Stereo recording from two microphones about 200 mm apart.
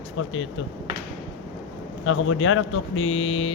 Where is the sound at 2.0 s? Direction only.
80° left.